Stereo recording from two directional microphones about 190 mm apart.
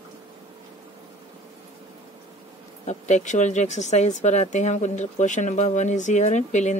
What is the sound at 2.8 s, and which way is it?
A woman's voice, 40° left (ahead or behind).